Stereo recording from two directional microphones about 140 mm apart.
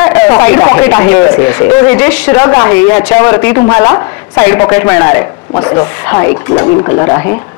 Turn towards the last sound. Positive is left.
turn(degrees=30)  # may be behind; listen again after turning